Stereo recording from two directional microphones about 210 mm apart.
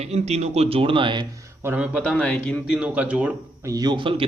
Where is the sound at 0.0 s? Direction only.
30° right (ahead or behind).